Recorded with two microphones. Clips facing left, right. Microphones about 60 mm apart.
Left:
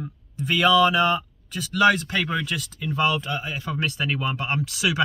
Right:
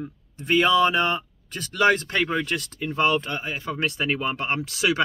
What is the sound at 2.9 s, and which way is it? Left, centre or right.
Speech, right.